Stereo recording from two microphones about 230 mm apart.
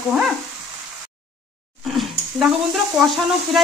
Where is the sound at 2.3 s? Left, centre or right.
Centre.